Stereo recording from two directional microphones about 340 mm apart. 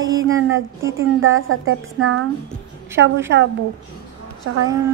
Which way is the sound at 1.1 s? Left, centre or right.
Right.